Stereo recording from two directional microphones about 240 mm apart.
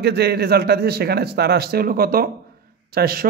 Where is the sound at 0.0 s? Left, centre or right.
Right.